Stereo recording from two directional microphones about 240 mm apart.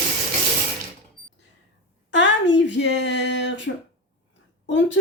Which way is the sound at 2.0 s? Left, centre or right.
Left.